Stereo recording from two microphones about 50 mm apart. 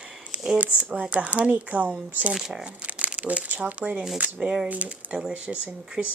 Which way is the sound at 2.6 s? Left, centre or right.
Right.